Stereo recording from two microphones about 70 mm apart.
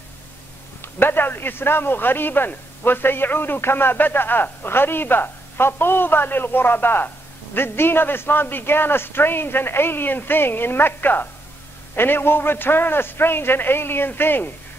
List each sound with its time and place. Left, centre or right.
0.9 s a man's voice: left